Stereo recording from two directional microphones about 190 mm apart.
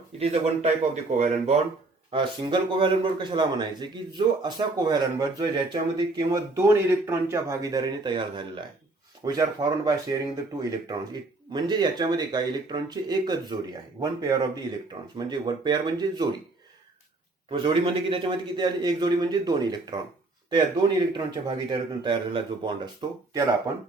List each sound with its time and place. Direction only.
0.2 s a man's voice: 35° right (ahead or behind)
2.0 s speech: 25° right (ahead or behind)
17.5 s speech: 25° right (ahead or behind)